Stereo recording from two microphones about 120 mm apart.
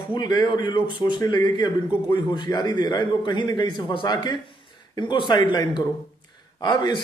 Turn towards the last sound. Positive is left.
turn(degrees=40)  # may be behind; listen again after turning